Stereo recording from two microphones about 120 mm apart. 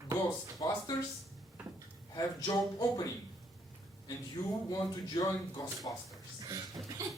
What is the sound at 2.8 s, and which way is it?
Speech, 30° left (ahead or behind).